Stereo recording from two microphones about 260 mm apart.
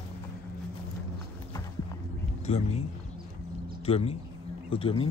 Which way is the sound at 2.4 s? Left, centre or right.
Left.